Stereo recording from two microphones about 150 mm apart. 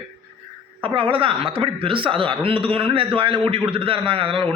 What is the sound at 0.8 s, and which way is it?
A man's voice, 35° right (ahead or behind).